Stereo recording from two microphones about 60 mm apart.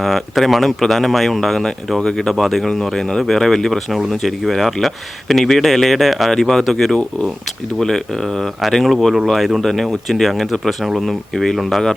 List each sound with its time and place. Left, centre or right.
0.0 s speech: centre